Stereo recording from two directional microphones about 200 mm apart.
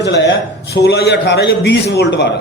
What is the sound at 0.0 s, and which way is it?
A man's voice, 65° left (ahead or behind).